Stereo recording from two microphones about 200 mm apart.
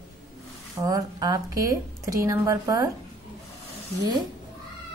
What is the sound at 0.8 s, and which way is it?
A woman's voice, 20° right (ahead or behind).